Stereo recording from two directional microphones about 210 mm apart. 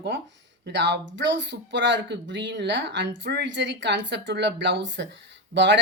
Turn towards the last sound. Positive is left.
turn(degrees=-60)  # may be behind; listen again after turning